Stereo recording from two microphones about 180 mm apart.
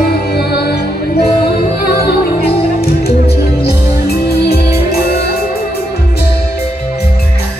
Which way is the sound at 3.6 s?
60° left (ahead or behind).